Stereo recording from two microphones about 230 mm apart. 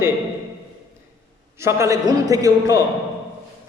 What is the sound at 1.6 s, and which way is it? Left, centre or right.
A man's voice, centre.